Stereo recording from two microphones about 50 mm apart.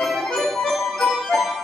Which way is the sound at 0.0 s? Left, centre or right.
Centre.